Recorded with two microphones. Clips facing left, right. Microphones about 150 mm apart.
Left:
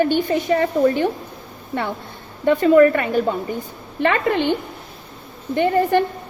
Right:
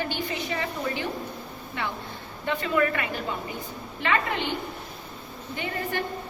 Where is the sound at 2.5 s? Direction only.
45° left (ahead or behind).